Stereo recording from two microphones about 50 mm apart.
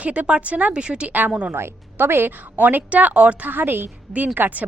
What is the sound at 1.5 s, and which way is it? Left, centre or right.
A woman's voice, right.